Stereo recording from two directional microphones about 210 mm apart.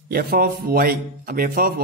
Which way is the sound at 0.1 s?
45° right (ahead or behind).